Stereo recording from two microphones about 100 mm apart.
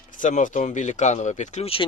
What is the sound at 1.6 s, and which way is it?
Speech, 70° left (ahead or behind).